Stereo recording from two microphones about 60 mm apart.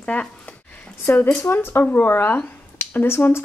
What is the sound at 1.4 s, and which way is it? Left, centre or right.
Speech, left.